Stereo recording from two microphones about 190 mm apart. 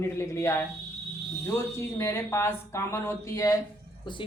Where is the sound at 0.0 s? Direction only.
15° left (ahead or behind).